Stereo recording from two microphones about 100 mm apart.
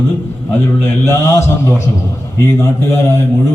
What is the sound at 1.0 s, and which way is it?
A man's voice, 30° left (ahead or behind).